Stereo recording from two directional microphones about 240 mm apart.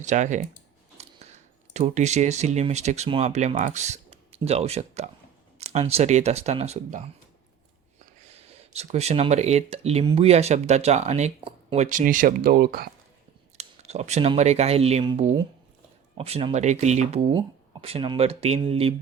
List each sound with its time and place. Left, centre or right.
0.0 s speech: right
8.7 s speech: right
13.6 s speech: right